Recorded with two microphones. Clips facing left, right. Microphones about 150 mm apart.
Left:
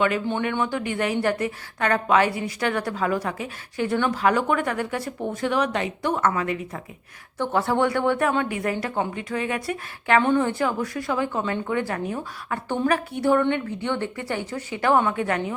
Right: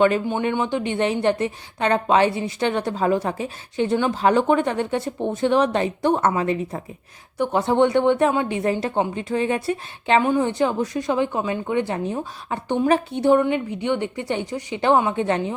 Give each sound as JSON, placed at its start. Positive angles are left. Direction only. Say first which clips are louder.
{"t": 0.5, "sound": "a woman's voice", "louder": "right 3 dB", "side_deg": -20}
{"t": 7.3, "sound": "a woman's voice", "louder": "right 4 dB", "side_deg": -15}
{"t": 10.2, "sound": "a woman's voice", "louder": "right 1 dB", "side_deg": -15}